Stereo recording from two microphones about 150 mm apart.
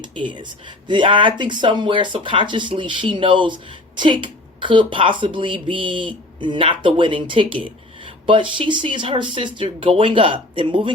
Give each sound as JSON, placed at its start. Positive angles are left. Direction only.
{"t": 0.0, "sound": "speech", "side_deg": -35}